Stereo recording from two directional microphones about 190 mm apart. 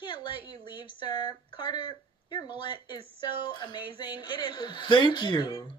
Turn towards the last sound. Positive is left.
turn(degrees=25)  # may be behind; listen again after turning